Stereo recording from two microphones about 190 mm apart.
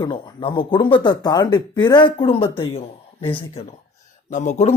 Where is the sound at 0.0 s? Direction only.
25° left (ahead or behind).